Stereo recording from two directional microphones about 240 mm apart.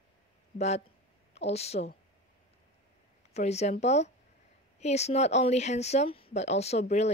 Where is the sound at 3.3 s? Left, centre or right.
Left.